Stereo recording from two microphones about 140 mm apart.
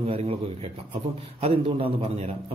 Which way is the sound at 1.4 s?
40° right (ahead or behind).